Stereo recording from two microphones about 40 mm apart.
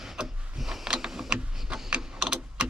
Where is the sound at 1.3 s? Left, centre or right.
Right.